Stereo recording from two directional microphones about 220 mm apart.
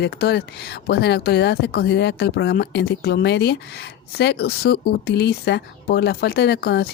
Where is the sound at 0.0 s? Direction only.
50° left (ahead or behind).